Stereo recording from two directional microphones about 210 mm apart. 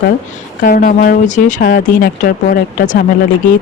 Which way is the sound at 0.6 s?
40° left (ahead or behind).